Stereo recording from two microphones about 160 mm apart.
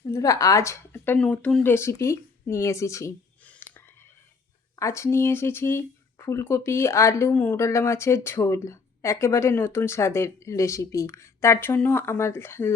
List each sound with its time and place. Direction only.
0.1 s speech: 20° left (ahead or behind)
1.7 s speech: 15° left (ahead or behind)